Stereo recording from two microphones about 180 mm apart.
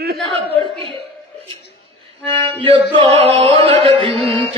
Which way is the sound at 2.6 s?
30° right (ahead or behind).